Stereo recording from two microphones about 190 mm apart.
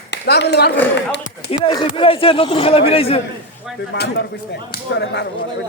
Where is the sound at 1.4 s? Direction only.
25° left (ahead or behind).